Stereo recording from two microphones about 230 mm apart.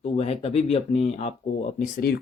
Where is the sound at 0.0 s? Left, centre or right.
Left.